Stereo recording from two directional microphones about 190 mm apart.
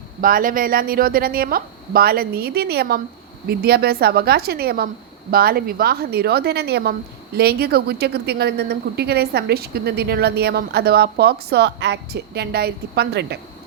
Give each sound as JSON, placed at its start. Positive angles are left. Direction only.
{"t": 0.2, "sound": "a woman's voice", "side_deg": -45}